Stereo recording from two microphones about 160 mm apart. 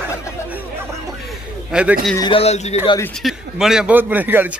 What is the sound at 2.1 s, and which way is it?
Speech, 30° left (ahead or behind).